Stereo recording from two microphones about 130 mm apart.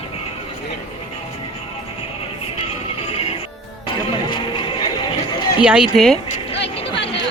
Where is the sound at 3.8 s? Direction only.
35° left (ahead or behind).